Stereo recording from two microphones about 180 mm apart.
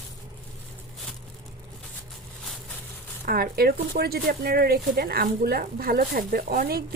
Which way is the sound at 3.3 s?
55° right (ahead or behind).